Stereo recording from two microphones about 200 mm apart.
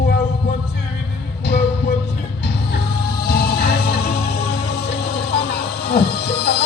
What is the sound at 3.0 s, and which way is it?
Music, 50° left (ahead or behind).